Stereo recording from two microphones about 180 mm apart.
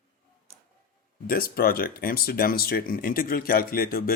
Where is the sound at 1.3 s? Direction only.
55° left (ahead or behind).